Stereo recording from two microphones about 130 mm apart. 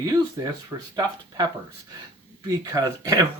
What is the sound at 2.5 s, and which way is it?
Speech, 30° right (ahead or behind).